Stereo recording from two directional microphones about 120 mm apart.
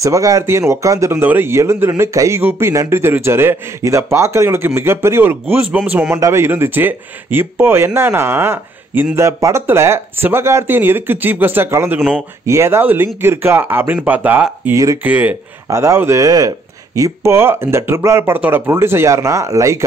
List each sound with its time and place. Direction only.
0.0 s speech: 30° right (ahead or behind)
6.1 s speech: 25° right (ahead or behind)
14.7 s speech: 25° right (ahead or behind)
15.0 s speech: 15° right (ahead or behind)